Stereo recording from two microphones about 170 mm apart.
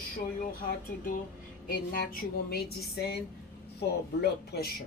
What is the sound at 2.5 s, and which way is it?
Speech, 70° left (ahead or behind).